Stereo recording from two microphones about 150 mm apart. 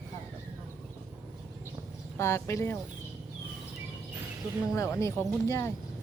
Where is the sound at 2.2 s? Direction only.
20° left (ahead or behind).